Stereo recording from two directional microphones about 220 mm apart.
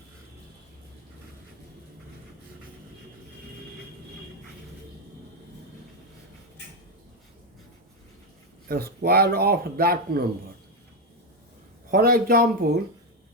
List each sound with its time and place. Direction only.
8.6 s speech: 45° right (ahead or behind)
11.9 s speech: 40° right (ahead or behind)